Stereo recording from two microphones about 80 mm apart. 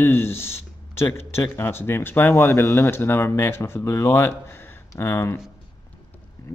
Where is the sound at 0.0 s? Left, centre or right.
Left.